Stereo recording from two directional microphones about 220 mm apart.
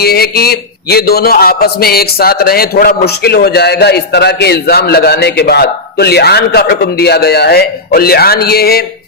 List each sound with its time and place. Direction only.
0.0 s a man's voice: 45° left (ahead or behind)